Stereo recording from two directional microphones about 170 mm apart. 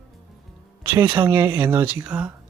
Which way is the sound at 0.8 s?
10° right (ahead or behind).